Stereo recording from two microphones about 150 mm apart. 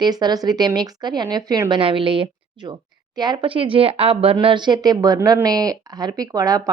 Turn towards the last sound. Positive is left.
turn(degrees=-25)  # may be behind; listen again after turning